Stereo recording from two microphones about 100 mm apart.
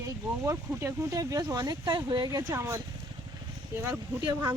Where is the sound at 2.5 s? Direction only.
30° right (ahead or behind).